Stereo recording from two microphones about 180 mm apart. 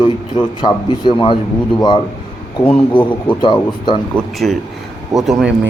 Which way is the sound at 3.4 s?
25° left (ahead or behind).